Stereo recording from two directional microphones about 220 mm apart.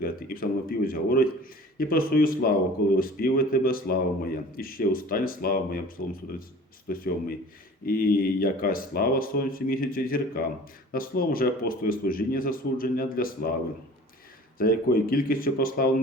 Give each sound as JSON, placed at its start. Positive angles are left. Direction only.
{"t": 0.0, "sound": "speech", "side_deg": 40}
{"t": 14.6, "sound": "speech", "side_deg": 40}